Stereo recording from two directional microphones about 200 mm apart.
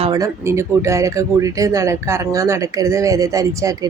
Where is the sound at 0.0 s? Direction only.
20° right (ahead or behind).